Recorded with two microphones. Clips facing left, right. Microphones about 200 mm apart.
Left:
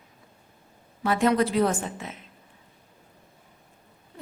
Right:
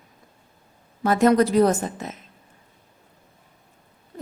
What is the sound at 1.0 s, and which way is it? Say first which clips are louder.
A woman's voice: right 5 dB; 45° right (ahead or behind).